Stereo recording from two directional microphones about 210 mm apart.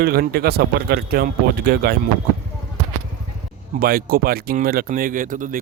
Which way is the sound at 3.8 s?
45° right (ahead or behind).